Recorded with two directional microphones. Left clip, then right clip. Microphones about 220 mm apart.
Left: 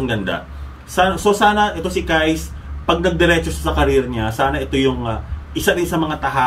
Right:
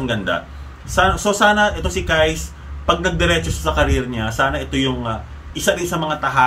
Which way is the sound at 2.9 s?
15° right (ahead or behind).